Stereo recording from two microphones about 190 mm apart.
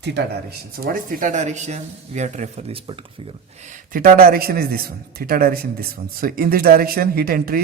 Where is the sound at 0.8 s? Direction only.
40° right (ahead or behind).